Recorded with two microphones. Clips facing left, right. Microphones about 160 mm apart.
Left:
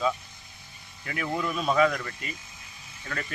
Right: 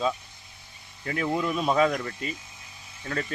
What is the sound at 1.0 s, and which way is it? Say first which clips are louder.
Speech: right 3 dB; 30° right (ahead or behind).